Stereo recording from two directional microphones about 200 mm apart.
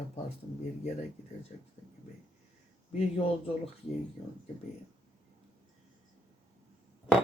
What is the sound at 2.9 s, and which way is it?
Speech, 30° left (ahead or behind).